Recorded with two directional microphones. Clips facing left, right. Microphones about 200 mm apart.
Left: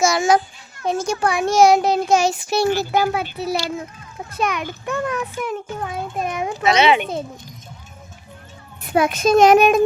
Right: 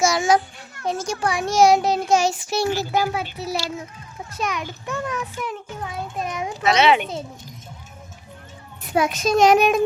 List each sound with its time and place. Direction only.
0.0 s a sound: 55° left (ahead or behind)
0.9 s a child's voice: 55° left (ahead or behind)
6.6 s a child's voice: centre (ahead or behind)
8.8 s a child's voice: 55° left (ahead or behind)